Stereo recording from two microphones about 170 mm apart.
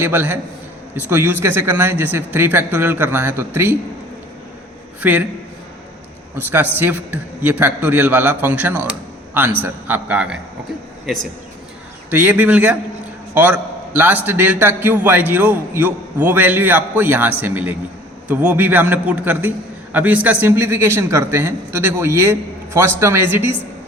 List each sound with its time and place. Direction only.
0.0 s a man's voice: 10° right (ahead or behind)
4.9 s a man's voice: 10° right (ahead or behind)
6.3 s a man's voice: 10° right (ahead or behind)
12.1 s a man's voice: 10° right (ahead or behind)